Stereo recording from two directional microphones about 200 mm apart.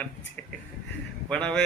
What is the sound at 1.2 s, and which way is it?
Speech, 5° left (ahead or behind).